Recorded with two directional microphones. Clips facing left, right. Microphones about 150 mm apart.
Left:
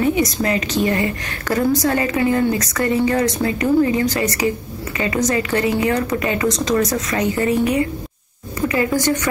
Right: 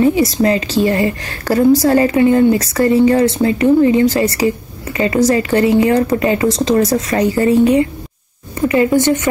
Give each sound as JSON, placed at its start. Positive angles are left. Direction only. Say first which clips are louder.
{"t": 0.0, "sound": "a woman's voice", "louder": "right 6 dB", "side_deg": -30}